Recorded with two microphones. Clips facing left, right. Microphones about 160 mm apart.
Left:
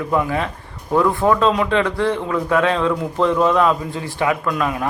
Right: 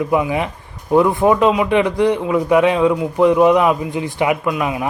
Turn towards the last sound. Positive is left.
turn(degrees=-15)  # may be behind; listen again after turning